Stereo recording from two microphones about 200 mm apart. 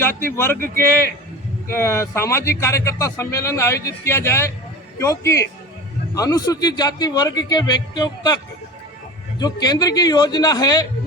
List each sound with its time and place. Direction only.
0.0 s a man's voice: 10° left (ahead or behind)
9.4 s a man's voice: 20° left (ahead or behind)